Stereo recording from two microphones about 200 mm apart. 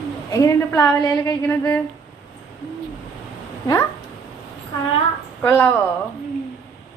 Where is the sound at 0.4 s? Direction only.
10° left (ahead or behind).